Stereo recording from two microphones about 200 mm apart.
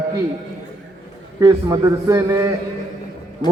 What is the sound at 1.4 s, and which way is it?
A man's voice, 15° right (ahead or behind).